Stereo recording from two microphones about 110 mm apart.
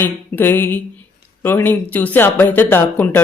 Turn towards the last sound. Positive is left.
turn(degrees=20)  # may be behind; listen again after turning